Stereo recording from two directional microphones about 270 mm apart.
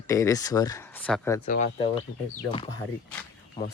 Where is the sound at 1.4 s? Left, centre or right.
Left.